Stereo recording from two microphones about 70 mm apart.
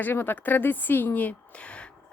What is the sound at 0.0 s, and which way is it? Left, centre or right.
A woman's voice, left.